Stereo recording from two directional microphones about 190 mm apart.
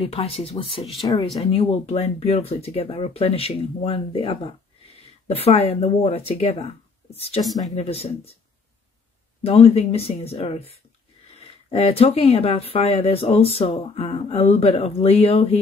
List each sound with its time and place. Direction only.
0.0 s speech: 30° left (ahead or behind)
9.4 s speech: 30° left (ahead or behind)